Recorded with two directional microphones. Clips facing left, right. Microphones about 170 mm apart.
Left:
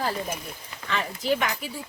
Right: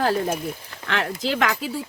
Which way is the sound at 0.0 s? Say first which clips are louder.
Right 7 dB; 75° right (ahead or behind).